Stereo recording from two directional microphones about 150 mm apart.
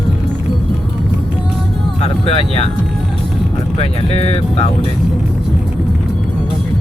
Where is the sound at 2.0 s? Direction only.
40° left (ahead or behind).